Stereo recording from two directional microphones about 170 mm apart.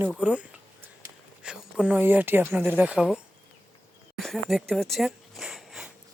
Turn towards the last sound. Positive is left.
turn(degrees=0)  # may be behind; listen again after turning